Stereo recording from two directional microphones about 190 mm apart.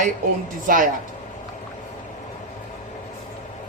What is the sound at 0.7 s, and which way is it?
Speech, 45° right (ahead or behind).